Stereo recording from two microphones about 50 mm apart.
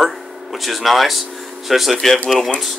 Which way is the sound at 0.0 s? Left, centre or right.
Centre.